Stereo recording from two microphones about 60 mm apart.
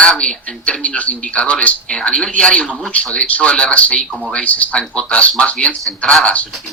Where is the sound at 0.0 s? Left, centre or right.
Centre.